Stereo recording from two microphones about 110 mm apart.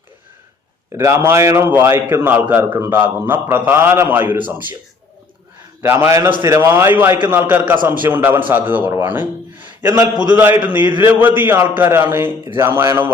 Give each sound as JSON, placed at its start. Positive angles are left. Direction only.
{"t": 0.9, "sound": "a man's voice", "side_deg": -25}
{"t": 5.8, "sound": "a man's voice", "side_deg": -20}